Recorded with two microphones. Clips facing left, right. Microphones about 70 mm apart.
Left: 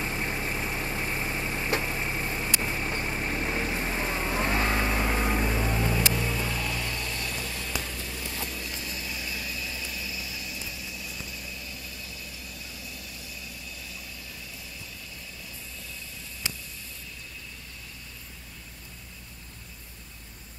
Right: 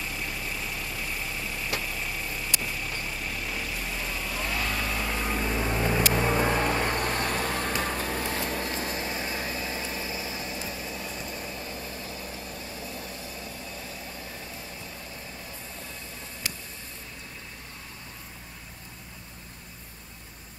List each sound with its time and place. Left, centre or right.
0.0 s vehicle: left; by 5.5 s centre
5.7 s vehicle: right
6.1 s vehicle: right